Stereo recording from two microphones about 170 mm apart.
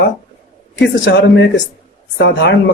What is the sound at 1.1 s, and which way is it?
A man's voice, 90° left.